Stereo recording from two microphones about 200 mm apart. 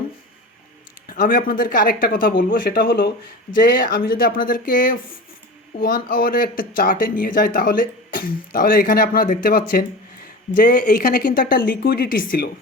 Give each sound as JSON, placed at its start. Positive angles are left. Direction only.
{"t": 1.0, "sound": "speech", "side_deg": 45}